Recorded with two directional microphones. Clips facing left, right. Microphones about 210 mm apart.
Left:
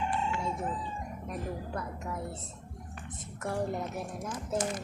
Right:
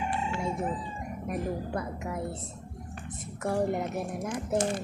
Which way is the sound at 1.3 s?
10° right (ahead or behind).